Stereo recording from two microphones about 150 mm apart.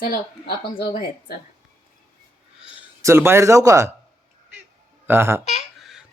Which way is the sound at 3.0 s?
15° right (ahead or behind).